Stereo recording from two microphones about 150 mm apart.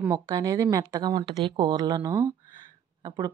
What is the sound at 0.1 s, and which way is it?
A woman's voice, 25° right (ahead or behind).